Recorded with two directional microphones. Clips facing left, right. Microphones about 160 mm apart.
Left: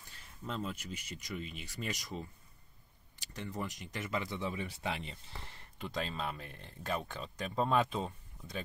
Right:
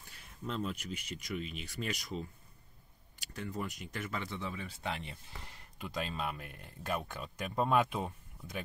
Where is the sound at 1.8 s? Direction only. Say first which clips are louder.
Right 2 dB; centre (ahead or behind).